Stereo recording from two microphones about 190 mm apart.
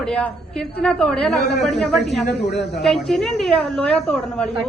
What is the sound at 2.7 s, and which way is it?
A woman's voice, centre (ahead or behind).